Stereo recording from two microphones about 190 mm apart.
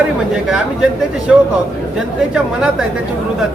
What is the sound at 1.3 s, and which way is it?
Speech, 5° right (ahead or behind).